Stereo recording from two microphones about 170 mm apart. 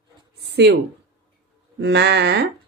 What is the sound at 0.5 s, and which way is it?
Speech, 80° right.